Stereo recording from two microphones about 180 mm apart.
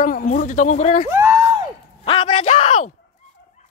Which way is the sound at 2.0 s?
30° left (ahead or behind).